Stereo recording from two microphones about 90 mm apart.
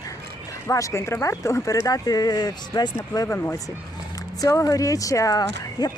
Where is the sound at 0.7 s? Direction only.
35° left (ahead or behind).